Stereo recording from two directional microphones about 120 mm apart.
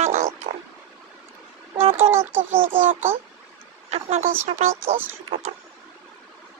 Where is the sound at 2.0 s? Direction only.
20° right (ahead or behind).